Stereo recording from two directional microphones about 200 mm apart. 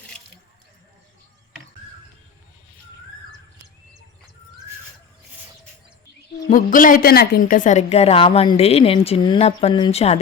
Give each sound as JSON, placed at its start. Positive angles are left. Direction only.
{"t": 6.5, "sound": "a woman's voice", "side_deg": 40}